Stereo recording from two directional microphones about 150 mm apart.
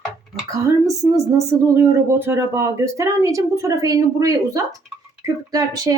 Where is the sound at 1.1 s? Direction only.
20° right (ahead or behind).